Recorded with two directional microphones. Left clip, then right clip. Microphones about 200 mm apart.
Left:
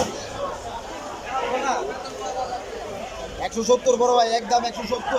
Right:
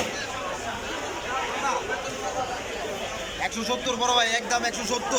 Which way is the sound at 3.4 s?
30° left (ahead or behind).